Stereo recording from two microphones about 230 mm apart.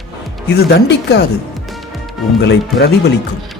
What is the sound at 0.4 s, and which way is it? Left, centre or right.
Speech, left.